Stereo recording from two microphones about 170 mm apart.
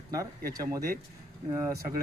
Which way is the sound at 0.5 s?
20° right (ahead or behind).